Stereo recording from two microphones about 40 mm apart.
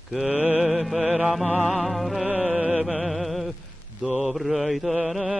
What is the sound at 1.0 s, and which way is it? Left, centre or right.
Mantra, right.